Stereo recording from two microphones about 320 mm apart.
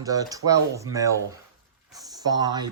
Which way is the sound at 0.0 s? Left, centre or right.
Centre.